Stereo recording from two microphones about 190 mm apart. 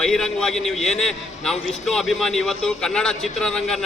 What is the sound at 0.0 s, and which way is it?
A man's voice, 5° left (ahead or behind).